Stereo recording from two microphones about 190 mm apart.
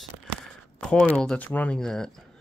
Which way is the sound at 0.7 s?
5° left (ahead or behind).